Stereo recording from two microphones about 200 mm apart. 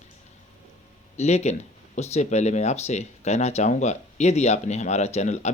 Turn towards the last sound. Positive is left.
turn(degrees=35)  # may be behind; listen again after turning